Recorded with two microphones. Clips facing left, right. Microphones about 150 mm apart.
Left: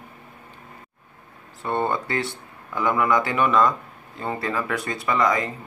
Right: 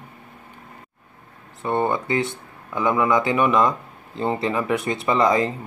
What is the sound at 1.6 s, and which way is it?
Speech, 15° right (ahead or behind).